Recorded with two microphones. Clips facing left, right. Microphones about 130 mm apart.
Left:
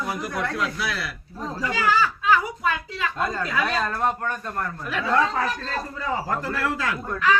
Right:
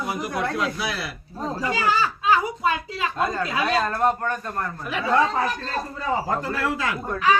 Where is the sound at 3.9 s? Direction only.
Centre (ahead or behind).